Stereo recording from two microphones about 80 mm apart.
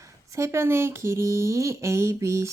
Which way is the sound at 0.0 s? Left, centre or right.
Right.